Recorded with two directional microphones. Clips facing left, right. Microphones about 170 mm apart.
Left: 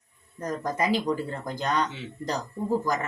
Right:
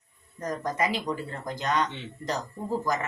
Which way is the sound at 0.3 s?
30° left (ahead or behind).